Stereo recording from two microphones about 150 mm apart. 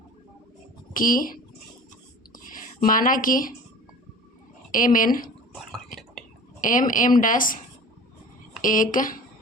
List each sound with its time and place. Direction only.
0.9 s speech: 65° left (ahead or behind)
2.3 s a sound: 65° left (ahead or behind)
4.7 s speech: 65° left (ahead or behind)
6.6 s speech: 60° left (ahead or behind)
8.6 s speech: 65° left (ahead or behind)